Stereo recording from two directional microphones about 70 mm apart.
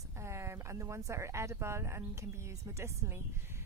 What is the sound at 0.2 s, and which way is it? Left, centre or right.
Speech, right.